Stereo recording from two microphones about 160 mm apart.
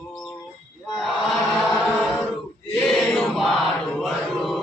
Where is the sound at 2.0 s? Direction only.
Centre (ahead or behind).